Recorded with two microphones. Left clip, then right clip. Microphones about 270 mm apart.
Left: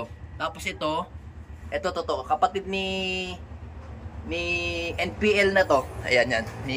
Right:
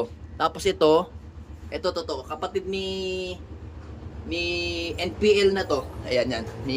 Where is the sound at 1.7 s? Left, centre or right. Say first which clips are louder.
Left 1 dB; centre.